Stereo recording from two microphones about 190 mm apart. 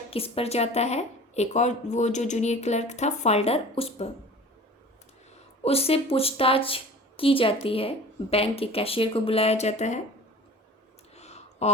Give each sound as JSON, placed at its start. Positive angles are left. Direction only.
{"t": 0.1, "sound": "a woman's voice", "side_deg": 30}
{"t": 5.6, "sound": "a woman's voice", "side_deg": 30}
{"t": 11.1, "sound": "a sound", "side_deg": 35}